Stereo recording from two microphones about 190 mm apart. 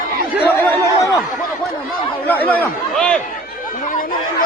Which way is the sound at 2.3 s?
10° left (ahead or behind).